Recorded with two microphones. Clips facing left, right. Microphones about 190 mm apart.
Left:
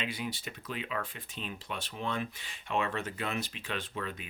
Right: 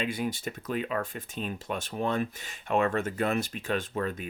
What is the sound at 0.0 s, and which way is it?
Speech, 45° right (ahead or behind).